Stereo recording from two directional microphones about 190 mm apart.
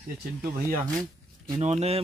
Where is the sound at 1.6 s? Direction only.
35° right (ahead or behind).